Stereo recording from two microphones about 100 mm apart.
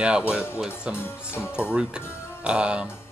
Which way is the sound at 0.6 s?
10° right (ahead or behind).